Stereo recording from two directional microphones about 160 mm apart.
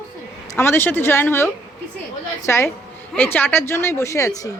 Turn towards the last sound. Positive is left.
turn(degrees=20)  # may be behind; listen again after turning